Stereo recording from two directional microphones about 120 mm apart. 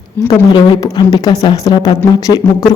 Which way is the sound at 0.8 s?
30° left (ahead or behind).